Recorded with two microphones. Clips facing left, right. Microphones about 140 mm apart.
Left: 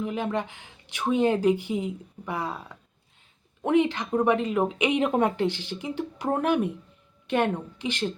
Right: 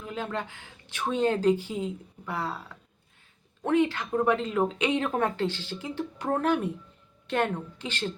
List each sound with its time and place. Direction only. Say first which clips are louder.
0.0 s speech: left 5 dB; 15° left (ahead or behind)
3.6 s speech: left 2 dB; 15° left (ahead or behind)